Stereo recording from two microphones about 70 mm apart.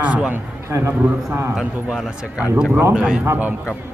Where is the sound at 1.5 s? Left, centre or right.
Centre.